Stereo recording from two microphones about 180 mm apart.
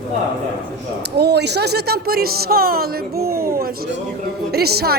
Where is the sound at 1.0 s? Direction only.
65° right (ahead or behind).